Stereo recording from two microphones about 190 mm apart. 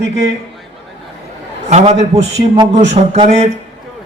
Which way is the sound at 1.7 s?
35° right (ahead or behind).